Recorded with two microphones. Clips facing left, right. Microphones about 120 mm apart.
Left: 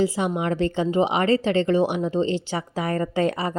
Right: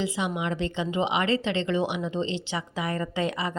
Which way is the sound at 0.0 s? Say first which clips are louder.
Left 6 dB; 40° left (ahead or behind).